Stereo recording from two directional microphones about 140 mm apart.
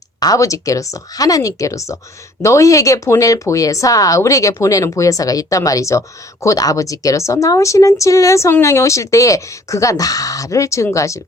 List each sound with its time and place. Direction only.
0.2 s speech: 25° left (ahead or behind)